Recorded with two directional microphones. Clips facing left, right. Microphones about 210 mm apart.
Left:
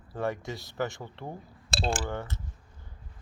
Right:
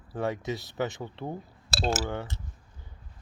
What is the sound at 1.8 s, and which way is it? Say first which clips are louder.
Speech: right 2 dB; 5° right (ahead or behind).